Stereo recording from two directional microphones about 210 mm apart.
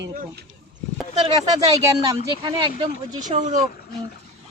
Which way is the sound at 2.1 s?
20° right (ahead or behind).